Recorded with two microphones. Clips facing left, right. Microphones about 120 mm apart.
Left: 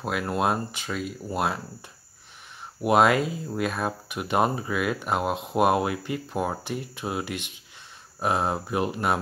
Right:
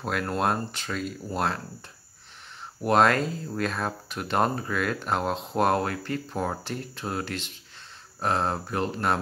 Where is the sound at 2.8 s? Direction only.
10° left (ahead or behind).